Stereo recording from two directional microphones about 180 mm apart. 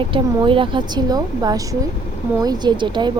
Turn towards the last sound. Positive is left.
turn(degrees=-25)  # may be behind; listen again after turning